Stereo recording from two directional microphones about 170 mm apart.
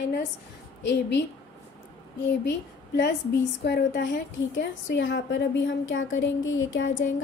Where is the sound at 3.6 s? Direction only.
75° left (ahead or behind).